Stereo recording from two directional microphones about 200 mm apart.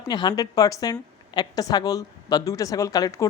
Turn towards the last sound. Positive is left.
turn(degrees=15)  # may be behind; listen again after turning